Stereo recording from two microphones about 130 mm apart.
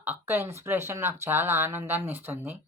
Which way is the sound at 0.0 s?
15° right (ahead or behind).